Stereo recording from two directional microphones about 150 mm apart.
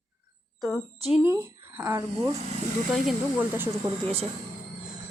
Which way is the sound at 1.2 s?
15° right (ahead or behind).